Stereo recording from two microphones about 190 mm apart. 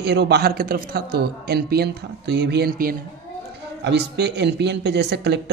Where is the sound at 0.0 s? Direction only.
60° right (ahead or behind).